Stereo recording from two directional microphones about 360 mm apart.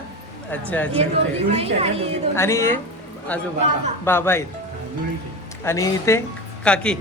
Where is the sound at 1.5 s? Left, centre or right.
Centre.